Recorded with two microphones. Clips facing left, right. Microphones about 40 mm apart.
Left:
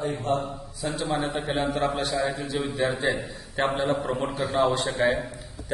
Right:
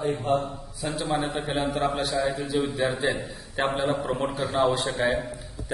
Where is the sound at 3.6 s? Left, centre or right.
Right.